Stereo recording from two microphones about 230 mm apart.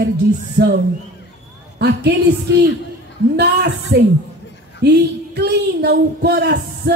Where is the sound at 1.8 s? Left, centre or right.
Right.